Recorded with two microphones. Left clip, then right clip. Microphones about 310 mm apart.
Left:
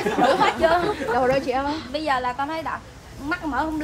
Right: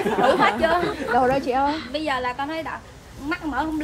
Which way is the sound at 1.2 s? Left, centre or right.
Centre.